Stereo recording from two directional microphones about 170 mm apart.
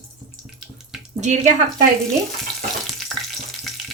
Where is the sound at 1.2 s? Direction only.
45° right (ahead or behind).